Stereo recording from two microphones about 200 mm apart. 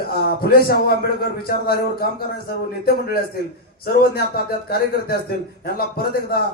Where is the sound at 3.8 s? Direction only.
50° left (ahead or behind).